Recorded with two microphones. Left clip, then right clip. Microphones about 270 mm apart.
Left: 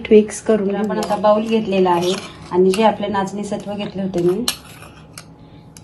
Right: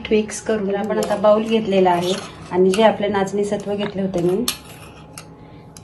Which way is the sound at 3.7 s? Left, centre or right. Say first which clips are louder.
Right 3 dB; centre.